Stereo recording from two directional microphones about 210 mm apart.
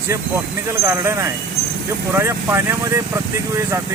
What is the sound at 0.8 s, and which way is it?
Speech, 15° right (ahead or behind).